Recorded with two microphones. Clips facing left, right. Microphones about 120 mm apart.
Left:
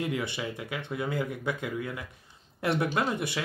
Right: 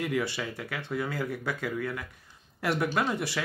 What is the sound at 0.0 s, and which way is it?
Speech, 20° left (ahead or behind).